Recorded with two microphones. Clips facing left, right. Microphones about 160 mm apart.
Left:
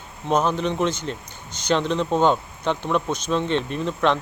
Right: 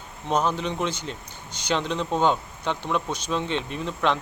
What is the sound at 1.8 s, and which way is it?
Speech, 15° left (ahead or behind).